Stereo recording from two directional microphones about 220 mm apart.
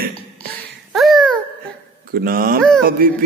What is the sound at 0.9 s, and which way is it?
Babbling, centre (ahead or behind).